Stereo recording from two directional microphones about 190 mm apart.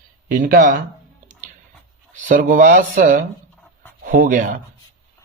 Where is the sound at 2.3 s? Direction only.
45° right (ahead or behind).